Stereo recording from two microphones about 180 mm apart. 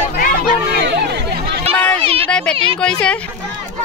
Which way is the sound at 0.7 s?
70° right (ahead or behind).